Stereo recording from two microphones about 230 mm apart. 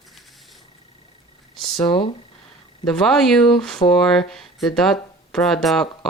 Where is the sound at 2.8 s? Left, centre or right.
Centre.